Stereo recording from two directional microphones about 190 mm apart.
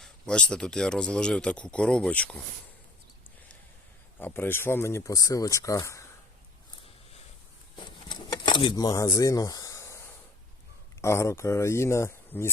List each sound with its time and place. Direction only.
0.0 s speech: 5° left (ahead or behind)
4.2 s speech: 10° left (ahead or behind)
7.8 s a sound: 25° left (ahead or behind)
11.0 s speech: 15° left (ahead or behind)